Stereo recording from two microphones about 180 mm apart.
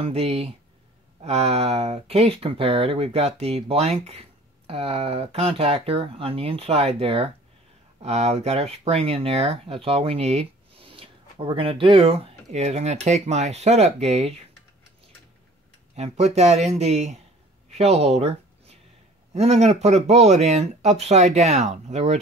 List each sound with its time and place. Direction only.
0.0 s speech: 35° right (ahead or behind)
16.0 s speech: 40° right (ahead or behind)
17.6 s a sound: 35° right (ahead or behind)
19.3 s speech: 35° right (ahead or behind)